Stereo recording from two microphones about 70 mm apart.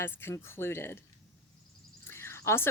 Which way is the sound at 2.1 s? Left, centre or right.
Left.